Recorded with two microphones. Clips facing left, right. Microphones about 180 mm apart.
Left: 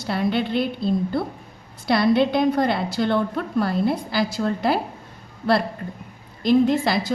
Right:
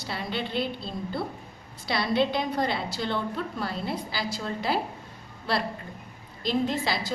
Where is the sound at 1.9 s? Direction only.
55° left (ahead or behind).